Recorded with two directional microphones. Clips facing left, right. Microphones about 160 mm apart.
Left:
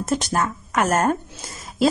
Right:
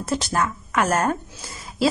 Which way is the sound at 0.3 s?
40° left (ahead or behind).